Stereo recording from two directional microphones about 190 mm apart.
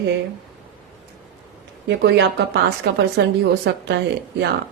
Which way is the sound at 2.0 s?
65° right (ahead or behind).